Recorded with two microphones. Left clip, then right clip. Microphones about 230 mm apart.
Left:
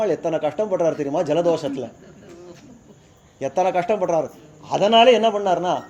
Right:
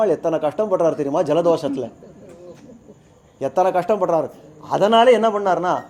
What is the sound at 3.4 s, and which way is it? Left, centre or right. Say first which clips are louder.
Speech: right 2 dB; right.